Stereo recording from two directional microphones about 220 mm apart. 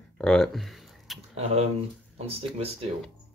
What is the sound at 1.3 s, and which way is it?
Speech, 30° right (ahead or behind).